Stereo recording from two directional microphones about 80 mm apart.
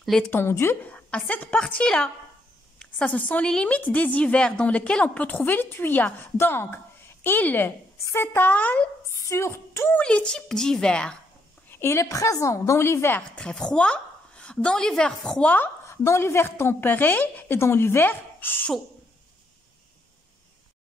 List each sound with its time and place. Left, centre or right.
0.3 s a woman's voice: left
0.8 s a woman's voice: centre
9.0 s speech: left
9.9 s a woman's voice: centre
11.7 s a woman's voice: left
13.4 s a woman's voice: centre
15.5 s a woman's voice: left